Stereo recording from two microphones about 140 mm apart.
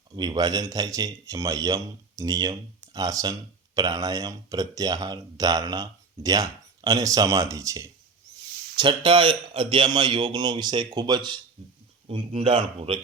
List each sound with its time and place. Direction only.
0.2 s a man's voice: 30° right (ahead or behind)
8.7 s speech: 35° right (ahead or behind)
11.6 s speech: 45° right (ahead or behind)